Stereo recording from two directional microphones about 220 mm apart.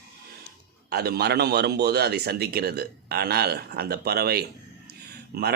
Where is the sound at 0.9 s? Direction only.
45° right (ahead or behind).